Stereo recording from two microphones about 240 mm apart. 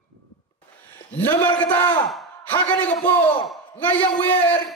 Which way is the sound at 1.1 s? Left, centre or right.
Centre.